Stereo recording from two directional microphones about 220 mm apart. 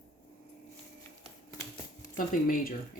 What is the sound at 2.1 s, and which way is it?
Speech, 40° left (ahead or behind).